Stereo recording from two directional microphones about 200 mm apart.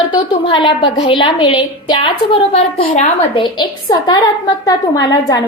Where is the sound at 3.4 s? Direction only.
20° left (ahead or behind).